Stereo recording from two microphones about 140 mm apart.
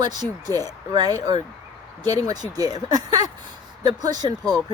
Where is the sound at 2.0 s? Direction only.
25° right (ahead or behind).